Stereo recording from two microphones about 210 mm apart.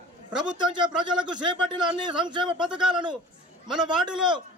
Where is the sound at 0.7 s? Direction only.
20° right (ahead or behind).